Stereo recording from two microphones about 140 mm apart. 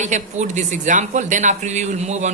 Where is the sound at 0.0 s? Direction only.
60° right (ahead or behind).